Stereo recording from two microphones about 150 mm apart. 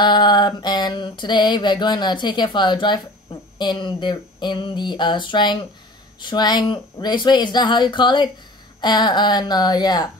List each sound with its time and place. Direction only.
0.0 s mantra: 30° left (ahead or behind)
3.5 s a sound: 30° left (ahead or behind)
6.2 s speech: 30° left (ahead or behind)